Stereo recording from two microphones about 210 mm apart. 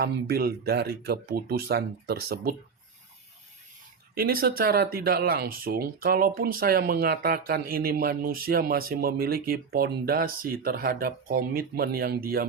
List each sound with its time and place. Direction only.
0.0 s speech: 50° right (ahead or behind)
4.1 s speech: 45° right (ahead or behind)